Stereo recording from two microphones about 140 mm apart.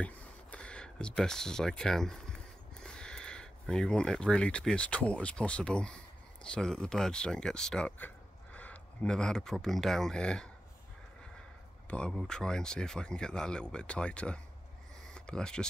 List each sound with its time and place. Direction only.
0.0 s speech: 10° left (ahead or behind)
11.9 s speech: 5° left (ahead or behind)